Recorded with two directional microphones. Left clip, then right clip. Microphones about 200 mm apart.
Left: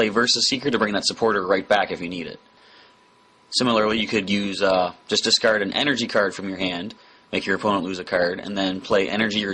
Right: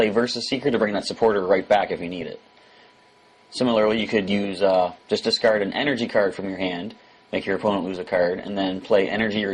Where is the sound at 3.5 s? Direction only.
15° left (ahead or behind).